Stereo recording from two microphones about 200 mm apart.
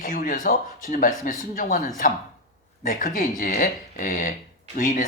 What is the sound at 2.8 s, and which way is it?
Speech, 40° left (ahead or behind).